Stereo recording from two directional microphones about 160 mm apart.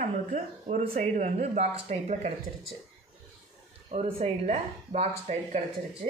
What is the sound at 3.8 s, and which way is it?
Speech, 40° right (ahead or behind).